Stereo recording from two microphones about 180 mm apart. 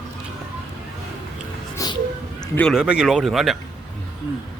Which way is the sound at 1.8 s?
20° left (ahead or behind).